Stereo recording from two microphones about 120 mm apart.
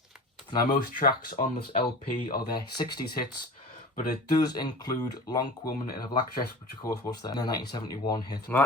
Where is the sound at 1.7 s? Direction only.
90° left.